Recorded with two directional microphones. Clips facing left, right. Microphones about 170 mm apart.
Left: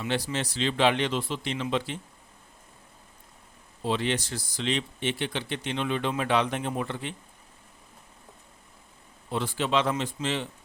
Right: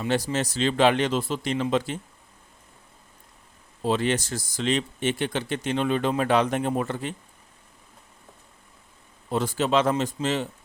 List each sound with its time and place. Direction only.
0.0 s speech: 40° right (ahead or behind)
3.8 s speech: 45° right (ahead or behind)
9.3 s speech: 40° right (ahead or behind)